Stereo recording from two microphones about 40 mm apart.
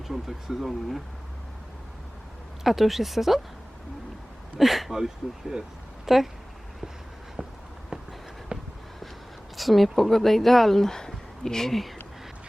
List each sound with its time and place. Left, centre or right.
0.1 s speech: centre
2.6 s speech: centre
4.6 s speech: centre
7.4 s a sound: right
7.9 s a sound: centre
9.6 s speech: centre